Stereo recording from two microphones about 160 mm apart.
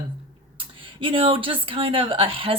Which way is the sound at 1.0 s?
35° right (ahead or behind).